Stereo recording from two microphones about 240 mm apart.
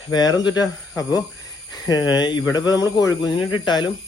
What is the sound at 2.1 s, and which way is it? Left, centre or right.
Speech, centre.